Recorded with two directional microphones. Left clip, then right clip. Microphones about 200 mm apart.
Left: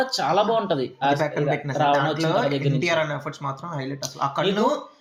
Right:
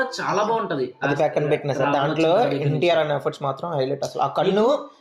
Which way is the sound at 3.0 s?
25° right (ahead or behind).